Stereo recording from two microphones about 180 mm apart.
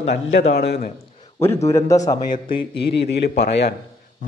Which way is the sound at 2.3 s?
60° left (ahead or behind).